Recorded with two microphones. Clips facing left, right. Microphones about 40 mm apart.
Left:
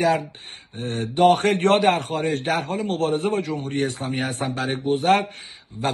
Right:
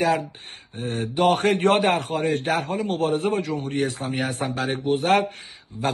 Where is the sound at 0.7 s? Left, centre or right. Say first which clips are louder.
Left 2 dB; left.